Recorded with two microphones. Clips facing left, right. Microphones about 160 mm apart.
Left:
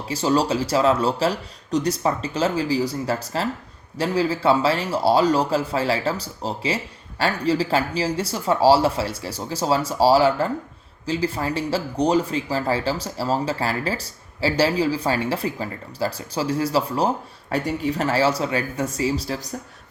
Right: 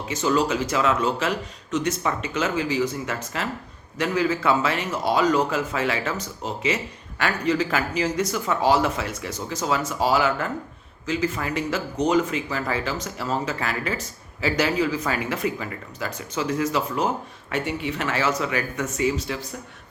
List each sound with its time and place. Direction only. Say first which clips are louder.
0.1 s speech: left 2 dB; 35° left (ahead or behind)